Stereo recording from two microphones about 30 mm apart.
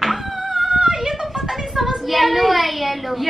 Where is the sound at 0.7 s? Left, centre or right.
Right.